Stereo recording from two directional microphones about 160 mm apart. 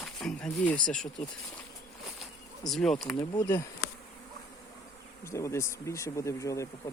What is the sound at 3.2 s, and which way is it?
Speech, 15° left (ahead or behind).